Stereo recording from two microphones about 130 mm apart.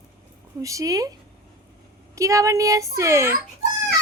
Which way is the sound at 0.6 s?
25° right (ahead or behind).